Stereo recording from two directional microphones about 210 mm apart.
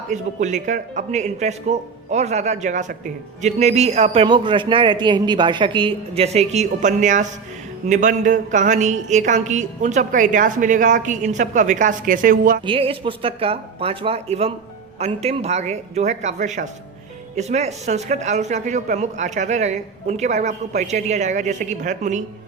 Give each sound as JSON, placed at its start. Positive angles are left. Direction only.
{"t": 0.1, "sound": "a man's voice", "side_deg": -35}
{"t": 12.6, "sound": "a man's voice", "side_deg": -25}